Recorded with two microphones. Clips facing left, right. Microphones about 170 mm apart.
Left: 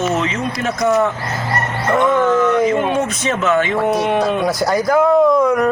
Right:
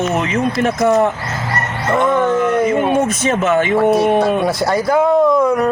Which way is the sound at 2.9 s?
45° right (ahead or behind).